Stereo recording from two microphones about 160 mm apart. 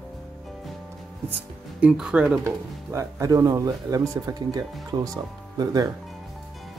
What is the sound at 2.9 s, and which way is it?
Speech, 20° right (ahead or behind).